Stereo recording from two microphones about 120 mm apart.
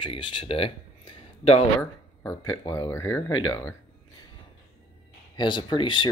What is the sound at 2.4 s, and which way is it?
Speech, 30° left (ahead or behind).